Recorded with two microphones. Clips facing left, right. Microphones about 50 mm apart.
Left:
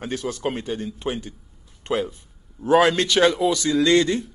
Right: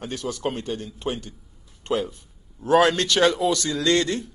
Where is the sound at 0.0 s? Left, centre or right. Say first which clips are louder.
Left 2 dB; centre.